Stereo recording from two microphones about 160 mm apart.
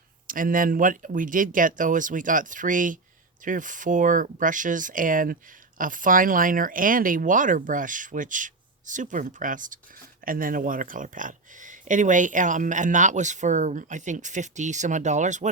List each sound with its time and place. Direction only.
0.3 s speech: 60° right (ahead or behind)